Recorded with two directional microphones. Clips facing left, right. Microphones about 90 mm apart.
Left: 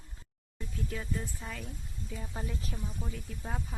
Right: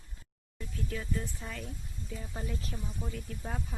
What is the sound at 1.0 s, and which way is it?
Speech, 15° left (ahead or behind).